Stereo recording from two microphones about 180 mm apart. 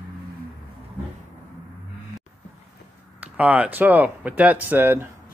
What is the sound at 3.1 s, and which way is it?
Speech, 5° right (ahead or behind).